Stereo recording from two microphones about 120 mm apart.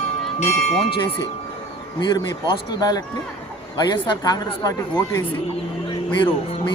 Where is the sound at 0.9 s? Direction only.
40° left (ahead or behind).